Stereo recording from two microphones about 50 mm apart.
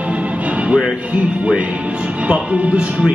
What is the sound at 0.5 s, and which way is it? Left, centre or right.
Music, right.